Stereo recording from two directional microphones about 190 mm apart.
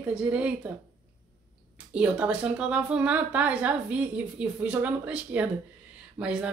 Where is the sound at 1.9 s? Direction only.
5° right (ahead or behind).